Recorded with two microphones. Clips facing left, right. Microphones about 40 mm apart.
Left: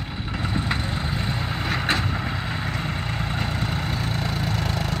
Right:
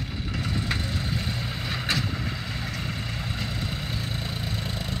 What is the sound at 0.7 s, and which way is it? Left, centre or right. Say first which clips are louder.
Vehicle: left 3 dB; left.